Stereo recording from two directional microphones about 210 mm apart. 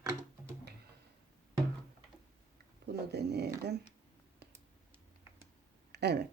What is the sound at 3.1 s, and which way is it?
Speech, 50° right (ahead or behind).